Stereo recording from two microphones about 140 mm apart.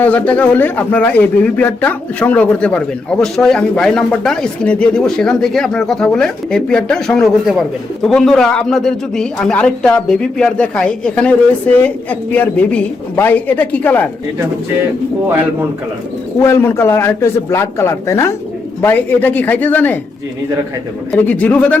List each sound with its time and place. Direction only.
0.0 s a man's voice: 10° left (ahead or behind)
16.4 s a man's voice: 20° left (ahead or behind)
21.1 s speech: 10° left (ahead or behind)